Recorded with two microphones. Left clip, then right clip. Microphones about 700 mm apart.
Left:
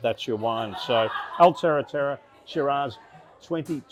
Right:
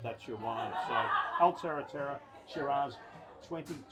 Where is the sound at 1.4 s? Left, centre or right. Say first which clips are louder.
Left 16 dB; left.